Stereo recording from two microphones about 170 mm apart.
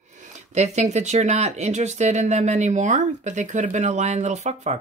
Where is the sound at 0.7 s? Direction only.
45° right (ahead or behind).